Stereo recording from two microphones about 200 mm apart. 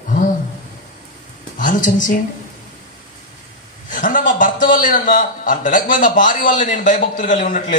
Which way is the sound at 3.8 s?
40° left (ahead or behind).